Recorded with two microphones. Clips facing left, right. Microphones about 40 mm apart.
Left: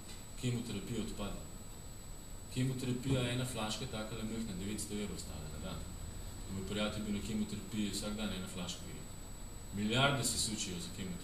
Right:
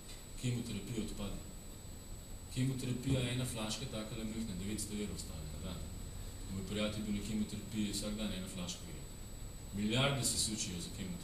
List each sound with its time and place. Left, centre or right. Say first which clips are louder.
0.4 s a man's voice: left 1 dB; centre
2.5 s a man's voice: left 1 dB; centre
9.8 s a man's voice: left 2 dB; centre